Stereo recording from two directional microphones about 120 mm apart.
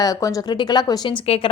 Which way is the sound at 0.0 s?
30° left (ahead or behind).